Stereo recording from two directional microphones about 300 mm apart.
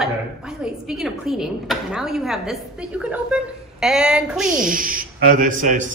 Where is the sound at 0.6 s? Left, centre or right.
Centre.